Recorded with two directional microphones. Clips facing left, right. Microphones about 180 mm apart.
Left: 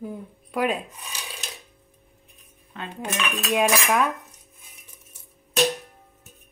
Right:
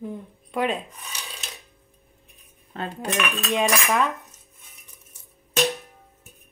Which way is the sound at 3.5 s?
Centre (ahead or behind).